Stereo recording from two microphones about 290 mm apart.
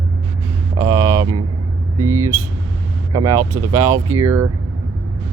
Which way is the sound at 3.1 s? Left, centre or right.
Centre.